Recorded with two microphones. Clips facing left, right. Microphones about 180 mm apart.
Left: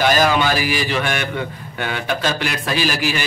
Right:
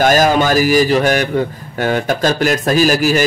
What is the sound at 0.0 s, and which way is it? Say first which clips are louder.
A man's voice: right 4 dB; 45° right (ahead or behind).